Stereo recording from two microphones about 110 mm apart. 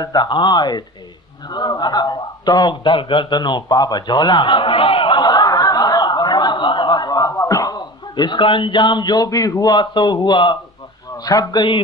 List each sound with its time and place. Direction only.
0.0 s a man's voice: 40° left (ahead or behind)